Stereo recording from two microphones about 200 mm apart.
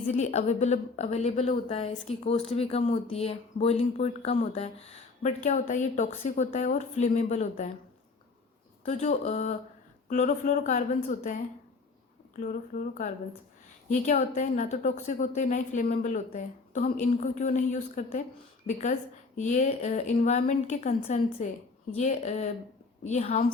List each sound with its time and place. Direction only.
0.1 s a woman's voice: 35° left (ahead or behind)
8.8 s a woman's voice: 35° left (ahead or behind)
12.4 s a woman's voice: 40° left (ahead or behind)